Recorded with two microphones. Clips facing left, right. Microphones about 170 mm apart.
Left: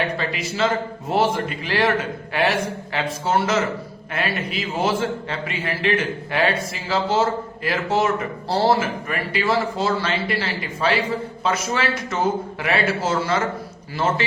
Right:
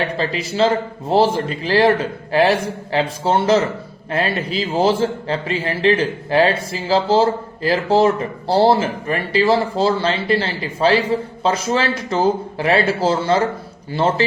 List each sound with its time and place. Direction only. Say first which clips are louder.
0.2 s a man's voice: right 5 dB; 30° right (ahead or behind)